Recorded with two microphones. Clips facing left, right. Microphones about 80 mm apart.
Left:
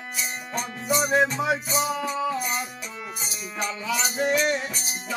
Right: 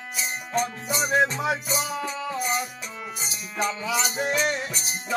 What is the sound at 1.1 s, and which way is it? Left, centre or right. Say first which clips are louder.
Music: right 1 dB; centre.